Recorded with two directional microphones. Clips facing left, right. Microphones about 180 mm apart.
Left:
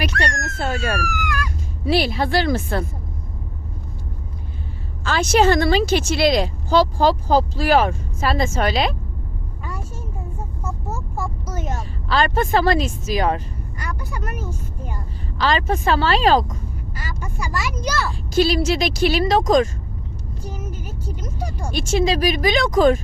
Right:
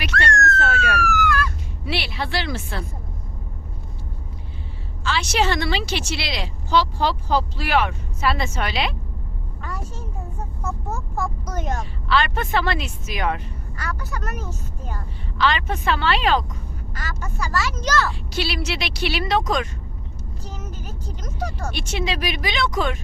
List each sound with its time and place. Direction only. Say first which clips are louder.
0.3 s police car: right 6 dB; 15° left (ahead or behind)
0.6 s police car: even; 35° left (ahead or behind)
1.0 s a sound: right 4 dB; 15° left (ahead or behind)
1.8 s speech: left 8 dB; 40° left (ahead or behind)
5.0 s speech: left 6 dB; 50° left (ahead or behind)
10.6 s vehicle: right 1 dB; 10° left (ahead or behind)
12.0 s speech: left 3 dB; 40° left (ahead or behind)
13.7 s speech: even; 15° left (ahead or behind)
15.4 s speech: left 2 dB; 40° left (ahead or behind)
16.9 s speech: right 1 dB; 10° left (ahead or behind)
18.3 s speech: left 10 dB; 45° left (ahead or behind)
20.4 s speech: left 4 dB; 10° left (ahead or behind)
21.8 s speech: left 8 dB; 40° left (ahead or behind)